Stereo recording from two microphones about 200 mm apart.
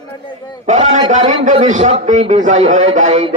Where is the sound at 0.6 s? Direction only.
35° right (ahead or behind).